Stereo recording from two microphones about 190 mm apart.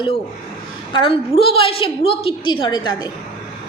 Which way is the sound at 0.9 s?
30° left (ahead or behind).